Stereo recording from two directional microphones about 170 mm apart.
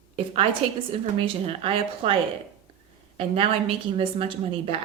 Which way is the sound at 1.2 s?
35° right (ahead or behind).